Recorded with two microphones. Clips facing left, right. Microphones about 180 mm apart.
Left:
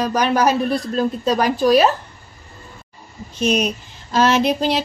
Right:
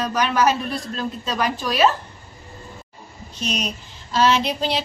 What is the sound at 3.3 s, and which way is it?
Speech, 50° left (ahead or behind).